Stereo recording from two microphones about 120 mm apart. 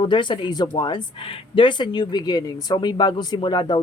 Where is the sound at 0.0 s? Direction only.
40° left (ahead or behind).